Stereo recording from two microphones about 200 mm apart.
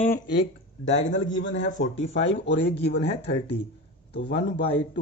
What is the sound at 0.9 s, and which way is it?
Speech, 40° left (ahead or behind).